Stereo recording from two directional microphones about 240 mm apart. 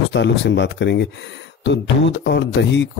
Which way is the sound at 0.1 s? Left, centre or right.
Left.